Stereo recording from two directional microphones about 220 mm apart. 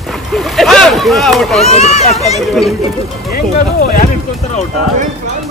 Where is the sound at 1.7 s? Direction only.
30° left (ahead or behind).